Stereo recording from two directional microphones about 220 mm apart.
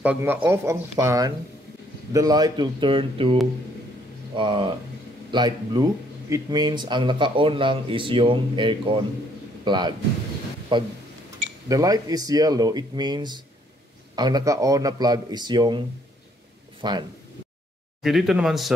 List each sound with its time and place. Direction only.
0.0 s speech: 5° right (ahead or behind); by 3.3 s 25° right (ahead or behind)
4.4 s speech: 20° right (ahead or behind)
16.8 s speech: 20° right (ahead or behind)
18.0 s speech: centre (ahead or behind)